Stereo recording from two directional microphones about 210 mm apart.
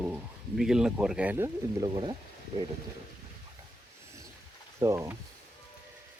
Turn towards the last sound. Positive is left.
turn(degrees=-15)  # may be behind; listen again after turning